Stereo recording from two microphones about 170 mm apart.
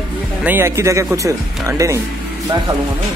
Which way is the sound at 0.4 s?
10° right (ahead or behind).